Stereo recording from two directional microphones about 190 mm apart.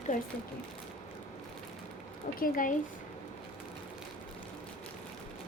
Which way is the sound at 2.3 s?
50° left (ahead or behind).